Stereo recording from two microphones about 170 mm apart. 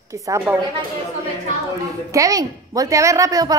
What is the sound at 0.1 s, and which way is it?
Speech, 15° right (ahead or behind).